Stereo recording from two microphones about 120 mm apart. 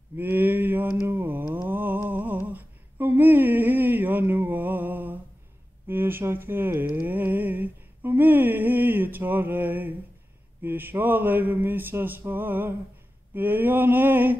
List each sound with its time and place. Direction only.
0.2 s mantra: 15° right (ahead or behind)
5.9 s speech: 20° right (ahead or behind)
10.6 s a sound: 15° right (ahead or behind)